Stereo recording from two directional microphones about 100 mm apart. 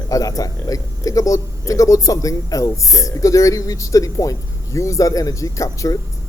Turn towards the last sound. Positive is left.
turn(degrees=35)  # may be behind; listen again after turning